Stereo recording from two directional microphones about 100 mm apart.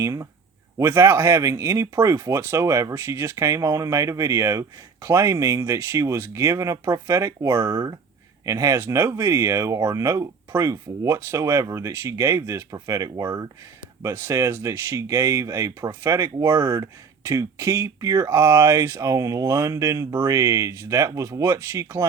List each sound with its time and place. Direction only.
0.0 s speech: 30° right (ahead or behind)